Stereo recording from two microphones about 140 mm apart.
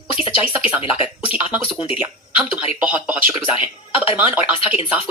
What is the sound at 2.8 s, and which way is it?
Speech, 10° right (ahead or behind).